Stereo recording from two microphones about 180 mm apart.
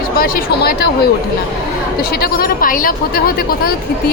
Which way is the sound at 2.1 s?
55° left (ahead or behind).